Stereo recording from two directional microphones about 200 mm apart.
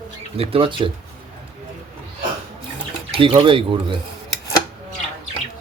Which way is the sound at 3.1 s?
25° right (ahead or behind).